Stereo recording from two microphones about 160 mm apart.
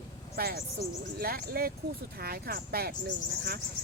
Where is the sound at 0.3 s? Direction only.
70° right (ahead or behind).